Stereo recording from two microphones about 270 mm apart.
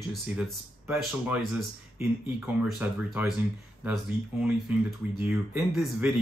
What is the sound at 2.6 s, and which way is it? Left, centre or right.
Speech, centre.